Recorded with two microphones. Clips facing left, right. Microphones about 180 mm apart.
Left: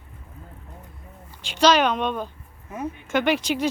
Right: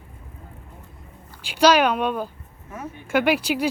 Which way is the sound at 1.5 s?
10° right (ahead or behind).